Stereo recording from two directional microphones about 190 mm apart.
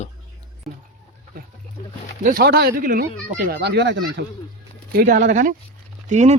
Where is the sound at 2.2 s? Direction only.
55° right (ahead or behind).